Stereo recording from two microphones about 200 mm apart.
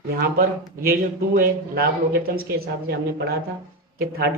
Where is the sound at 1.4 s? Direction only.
50° right (ahead or behind).